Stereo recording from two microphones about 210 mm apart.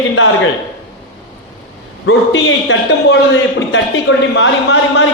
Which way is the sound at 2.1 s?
65° left (ahead or behind).